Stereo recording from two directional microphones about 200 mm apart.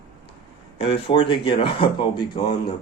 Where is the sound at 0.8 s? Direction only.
25° left (ahead or behind).